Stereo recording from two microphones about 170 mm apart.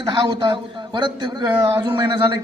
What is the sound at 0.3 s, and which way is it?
A man's voice, 25° right (ahead or behind).